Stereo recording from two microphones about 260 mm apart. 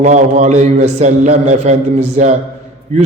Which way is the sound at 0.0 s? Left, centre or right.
Right.